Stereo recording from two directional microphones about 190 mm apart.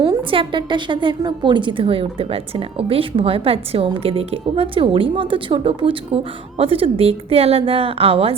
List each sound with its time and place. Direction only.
0.0 s a woman's voice: 25° right (ahead or behind)